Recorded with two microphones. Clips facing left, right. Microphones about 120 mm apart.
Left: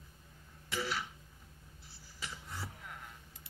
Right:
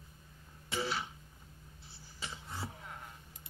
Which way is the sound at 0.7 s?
30° right (ahead or behind).